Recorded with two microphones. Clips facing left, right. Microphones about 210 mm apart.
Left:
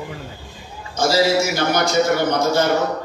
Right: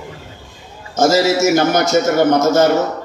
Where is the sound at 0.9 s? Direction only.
45° right (ahead or behind).